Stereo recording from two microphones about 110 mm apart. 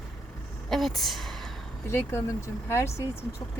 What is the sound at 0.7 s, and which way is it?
Speech, centre (ahead or behind).